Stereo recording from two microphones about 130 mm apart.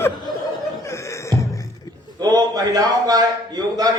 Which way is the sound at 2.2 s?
30° right (ahead or behind).